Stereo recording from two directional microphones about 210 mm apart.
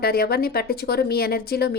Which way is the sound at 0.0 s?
45° left (ahead or behind).